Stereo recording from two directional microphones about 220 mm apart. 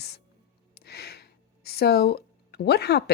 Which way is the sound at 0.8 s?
45° left (ahead or behind).